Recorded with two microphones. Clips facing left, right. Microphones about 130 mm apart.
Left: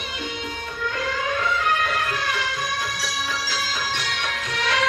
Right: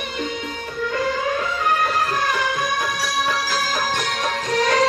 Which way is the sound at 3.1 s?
55° right (ahead or behind).